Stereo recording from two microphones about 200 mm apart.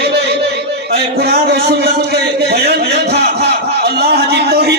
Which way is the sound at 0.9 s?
55° right (ahead or behind).